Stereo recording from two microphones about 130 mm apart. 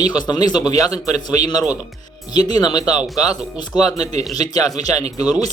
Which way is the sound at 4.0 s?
55° right (ahead or behind).